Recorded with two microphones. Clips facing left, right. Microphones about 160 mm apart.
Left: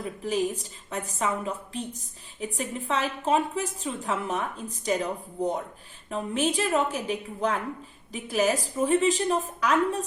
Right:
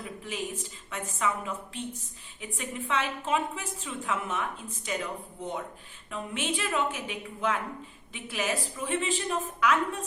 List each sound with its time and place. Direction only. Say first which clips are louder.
0.2 s a woman's voice: left 10 dB; 40° left (ahead or behind)